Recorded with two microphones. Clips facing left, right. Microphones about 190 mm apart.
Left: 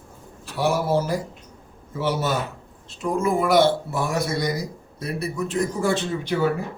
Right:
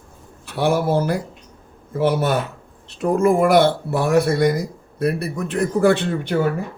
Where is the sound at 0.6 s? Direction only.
55° right (ahead or behind).